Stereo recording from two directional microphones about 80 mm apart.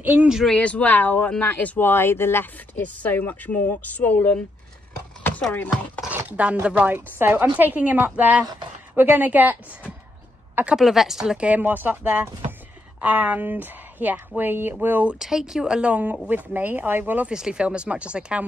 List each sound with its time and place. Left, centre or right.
0.0 s speech: centre
0.5 s speech: centre
6.0 s speech: centre
10.5 s a sound: centre
10.8 s speech: centre; by 15.1 s right
15.1 s speech: centre; by 17.3 s right
17.3 s speech: centre